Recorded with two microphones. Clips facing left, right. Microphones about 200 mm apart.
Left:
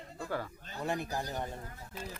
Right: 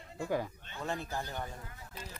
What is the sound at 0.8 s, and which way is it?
Speech, 15° left (ahead or behind).